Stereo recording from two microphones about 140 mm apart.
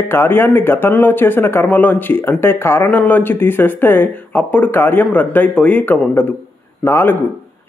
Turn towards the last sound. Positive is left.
turn(degrees=15)  # may be behind; listen again after turning